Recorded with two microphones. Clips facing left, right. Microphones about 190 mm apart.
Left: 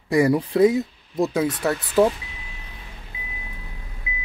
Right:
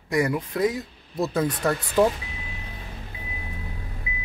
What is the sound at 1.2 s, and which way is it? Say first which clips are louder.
Speech: left 2 dB; 10° left (ahead or behind).